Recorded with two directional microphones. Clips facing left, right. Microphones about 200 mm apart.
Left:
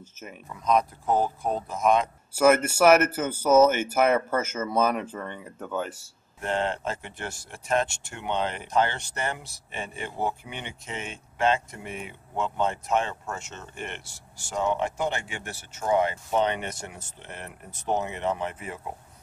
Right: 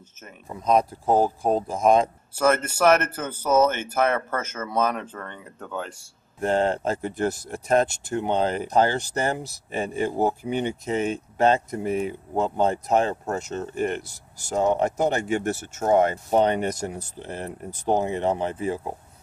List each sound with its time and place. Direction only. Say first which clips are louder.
0.5 s speech: right 3 dB; 30° right (ahead or behind)
2.3 s speech: left 2 dB; 10° left (ahead or behind)
6.4 s speech: right 6 dB; 40° right (ahead or behind)